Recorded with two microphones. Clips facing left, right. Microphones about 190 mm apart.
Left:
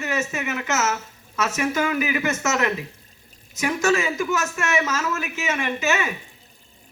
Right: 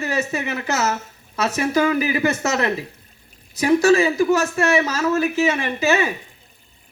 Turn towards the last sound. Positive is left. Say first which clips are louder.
# right 4 dB
turn(degrees=-35)  # may be behind; listen again after turning